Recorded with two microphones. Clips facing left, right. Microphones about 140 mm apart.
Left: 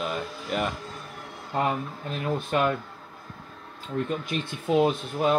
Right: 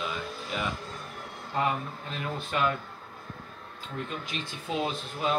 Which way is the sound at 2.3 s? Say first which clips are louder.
Left 3 dB; 50° left (ahead or behind).